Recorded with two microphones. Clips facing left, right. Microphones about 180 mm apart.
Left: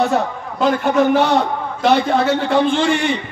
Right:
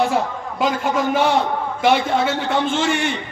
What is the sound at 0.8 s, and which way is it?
A man's voice, 70° left (ahead or behind).